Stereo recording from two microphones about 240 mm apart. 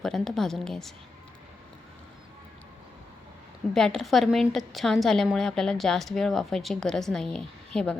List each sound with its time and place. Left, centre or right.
0.0 s a woman's voice: centre
3.8 s a woman's voice: centre